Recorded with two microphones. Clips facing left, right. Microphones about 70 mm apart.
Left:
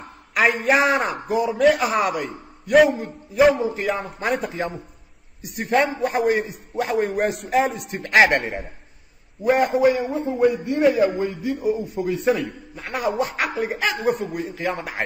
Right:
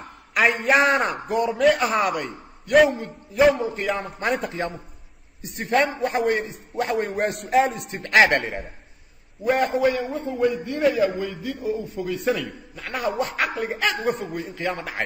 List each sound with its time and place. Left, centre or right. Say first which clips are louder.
0.3 s a man's voice: left 1 dB; centre
9.6 s a man's voice: left 3 dB; centre
13.2 s a man's voice: left 1 dB; centre